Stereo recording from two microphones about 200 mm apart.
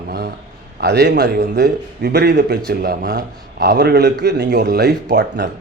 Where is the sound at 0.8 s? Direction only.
55° right (ahead or behind).